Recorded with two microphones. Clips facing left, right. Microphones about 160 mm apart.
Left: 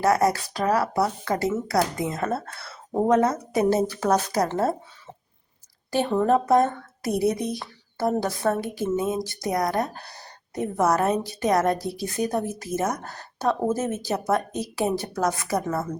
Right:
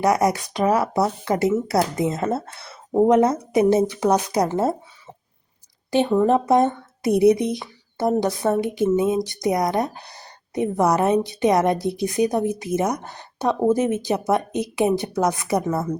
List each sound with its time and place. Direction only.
0.0 s speech: 20° right (ahead or behind)
6.1 s speech: 15° right (ahead or behind)